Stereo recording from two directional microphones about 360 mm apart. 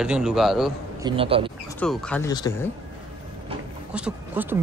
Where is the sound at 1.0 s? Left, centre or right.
Centre.